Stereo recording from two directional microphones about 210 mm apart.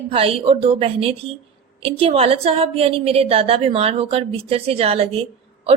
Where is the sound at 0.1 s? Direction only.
25° right (ahead or behind).